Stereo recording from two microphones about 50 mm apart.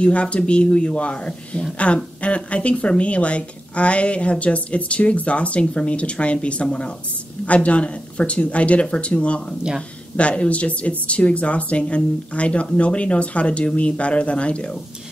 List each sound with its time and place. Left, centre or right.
0.0 s a woman's voice: left